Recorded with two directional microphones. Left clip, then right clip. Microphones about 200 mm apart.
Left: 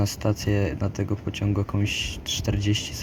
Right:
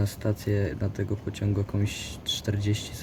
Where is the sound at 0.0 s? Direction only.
15° left (ahead or behind).